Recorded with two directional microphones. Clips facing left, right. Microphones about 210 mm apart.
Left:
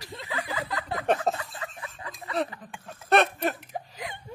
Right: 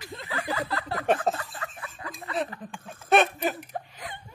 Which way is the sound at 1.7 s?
20° left (ahead or behind).